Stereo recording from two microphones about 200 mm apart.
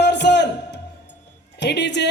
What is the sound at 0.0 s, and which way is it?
Music, 60° left (ahead or behind).